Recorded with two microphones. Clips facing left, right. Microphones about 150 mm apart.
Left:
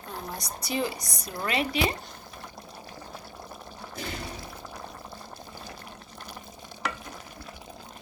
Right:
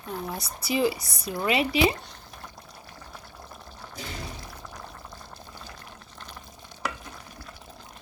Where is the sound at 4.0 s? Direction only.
60° left (ahead or behind).